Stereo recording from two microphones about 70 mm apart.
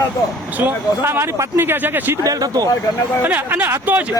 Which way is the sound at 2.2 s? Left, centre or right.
Right.